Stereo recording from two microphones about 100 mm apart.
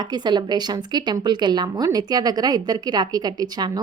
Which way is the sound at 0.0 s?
45° right (ahead or behind).